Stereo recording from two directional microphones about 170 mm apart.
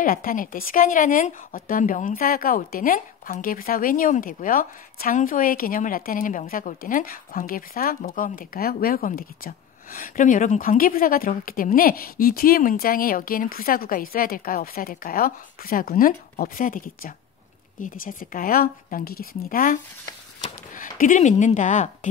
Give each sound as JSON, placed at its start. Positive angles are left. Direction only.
{"t": 0.0, "sound": "speech", "side_deg": 55}
{"t": 20.4, "sound": "a sound", "side_deg": 55}
{"t": 21.0, "sound": "speech", "side_deg": 50}